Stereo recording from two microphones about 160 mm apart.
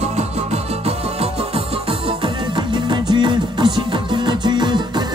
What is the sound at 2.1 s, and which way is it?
Music, 30° right (ahead or behind).